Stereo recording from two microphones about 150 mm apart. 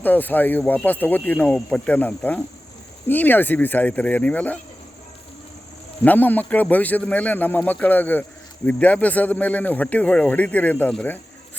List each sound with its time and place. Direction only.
0.0 s speech: 10° left (ahead or behind)
6.0 s speech: 10° left (ahead or behind)